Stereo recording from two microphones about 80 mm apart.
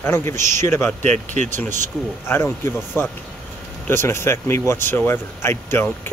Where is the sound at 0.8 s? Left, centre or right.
Centre.